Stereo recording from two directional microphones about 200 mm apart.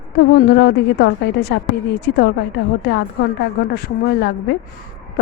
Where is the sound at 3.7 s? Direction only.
55° left (ahead or behind).